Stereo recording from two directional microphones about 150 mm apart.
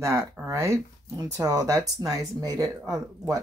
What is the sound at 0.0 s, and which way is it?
Speech, 20° right (ahead or behind).